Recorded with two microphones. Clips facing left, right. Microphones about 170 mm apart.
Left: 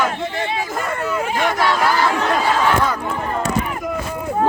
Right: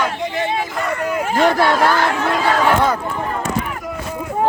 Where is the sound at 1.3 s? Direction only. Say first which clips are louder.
Right 6 dB; 50° right (ahead or behind).